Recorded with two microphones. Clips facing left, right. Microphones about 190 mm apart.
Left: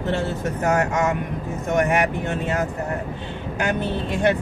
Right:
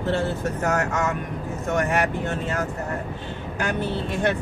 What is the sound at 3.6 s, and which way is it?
Speech, 15° left (ahead or behind).